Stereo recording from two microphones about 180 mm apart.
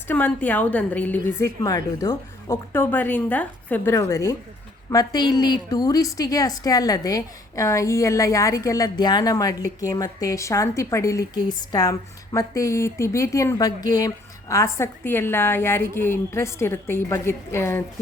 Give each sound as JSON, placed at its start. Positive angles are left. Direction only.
{"t": 0.1, "sound": "a woman's voice", "side_deg": 10}